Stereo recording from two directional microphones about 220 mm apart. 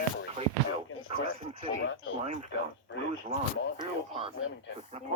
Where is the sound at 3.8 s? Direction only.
25° right (ahead or behind).